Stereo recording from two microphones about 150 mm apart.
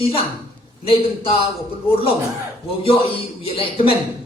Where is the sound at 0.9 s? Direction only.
40° left (ahead or behind).